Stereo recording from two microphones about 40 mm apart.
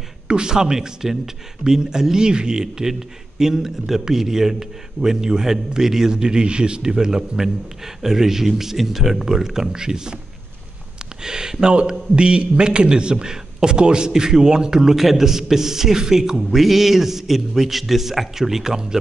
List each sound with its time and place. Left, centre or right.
0.3 s speech: centre
11.2 s a man's voice: centre